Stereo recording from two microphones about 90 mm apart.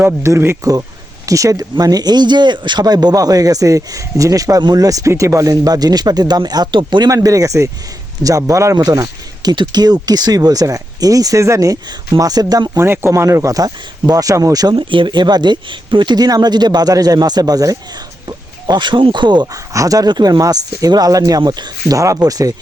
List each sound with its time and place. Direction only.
0.0 s speech: 30° right (ahead or behind); by 7.1 s 60° right (ahead or behind)
7.1 s speech: 40° right (ahead or behind)
12.8 s speech: 25° right (ahead or behind); by 14.8 s 45° right (ahead or behind)
14.8 s speech: 70° right (ahead or behind); by 19.5 s 55° right (ahead or behind)
19.5 s speech: 40° right (ahead or behind)
21.9 s speech: 35° right (ahead or behind)